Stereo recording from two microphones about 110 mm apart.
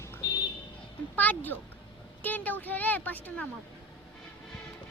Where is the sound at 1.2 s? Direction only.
15° left (ahead or behind).